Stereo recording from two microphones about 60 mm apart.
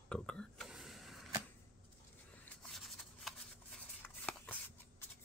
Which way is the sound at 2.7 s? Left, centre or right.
Centre.